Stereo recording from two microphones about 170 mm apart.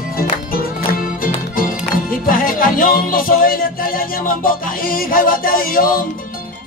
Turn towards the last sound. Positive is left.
turn(degrees=55)  # may be behind; listen again after turning